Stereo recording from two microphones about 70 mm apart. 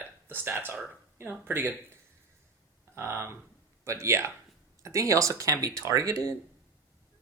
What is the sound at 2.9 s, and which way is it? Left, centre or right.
Speech, right.